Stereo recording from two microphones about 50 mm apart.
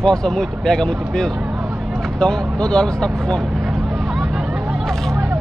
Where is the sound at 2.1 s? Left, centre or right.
Centre.